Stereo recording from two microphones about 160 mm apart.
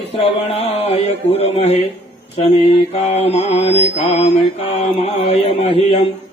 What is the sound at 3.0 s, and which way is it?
Mantra, 40° left (ahead or behind).